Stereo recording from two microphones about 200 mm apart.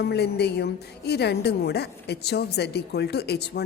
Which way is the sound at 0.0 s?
55° left (ahead or behind).